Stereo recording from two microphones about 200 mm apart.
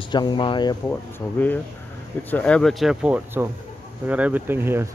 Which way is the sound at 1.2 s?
10° left (ahead or behind).